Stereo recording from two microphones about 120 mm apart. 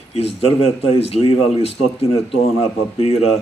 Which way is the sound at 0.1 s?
55° left (ahead or behind).